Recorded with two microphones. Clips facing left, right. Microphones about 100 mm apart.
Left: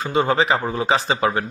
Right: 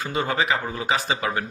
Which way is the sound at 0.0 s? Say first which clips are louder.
Left 6 dB; 25° left (ahead or behind).